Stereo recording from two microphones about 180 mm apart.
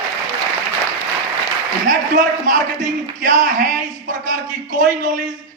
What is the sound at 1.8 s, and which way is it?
A man's voice, 50° right (ahead or behind).